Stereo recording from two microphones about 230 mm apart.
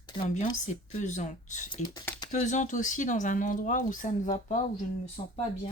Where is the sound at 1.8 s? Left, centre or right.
Centre.